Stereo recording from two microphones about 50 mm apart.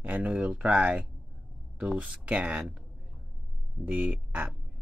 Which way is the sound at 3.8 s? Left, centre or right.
Right.